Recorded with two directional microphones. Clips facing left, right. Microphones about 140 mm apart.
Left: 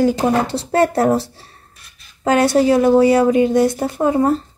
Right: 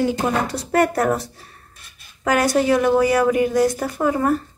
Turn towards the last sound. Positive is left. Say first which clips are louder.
# left 4 dB
turn(degrees=25)  # may be behind; listen again after turning